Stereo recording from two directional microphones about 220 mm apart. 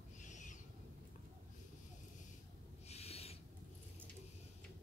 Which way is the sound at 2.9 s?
30° left (ahead or behind).